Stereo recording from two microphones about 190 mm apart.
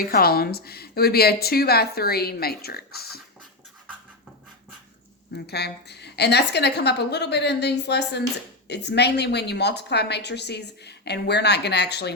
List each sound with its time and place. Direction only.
0.0 s a woman's voice: 55° left (ahead or behind)
5.3 s a woman's voice: 60° left (ahead or behind)